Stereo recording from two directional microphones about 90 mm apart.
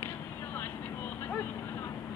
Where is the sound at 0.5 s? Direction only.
20° left (ahead or behind).